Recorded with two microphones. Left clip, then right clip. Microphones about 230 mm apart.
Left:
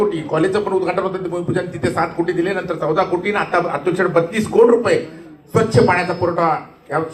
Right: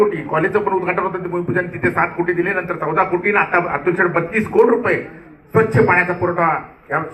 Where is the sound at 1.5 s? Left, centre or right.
Left.